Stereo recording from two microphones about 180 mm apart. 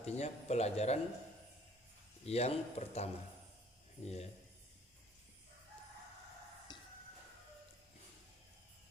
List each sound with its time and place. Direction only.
0.0 s a man's voice: 35° left (ahead or behind)
2.2 s a man's voice: 35° left (ahead or behind)
6.7 s music: 25° left (ahead or behind)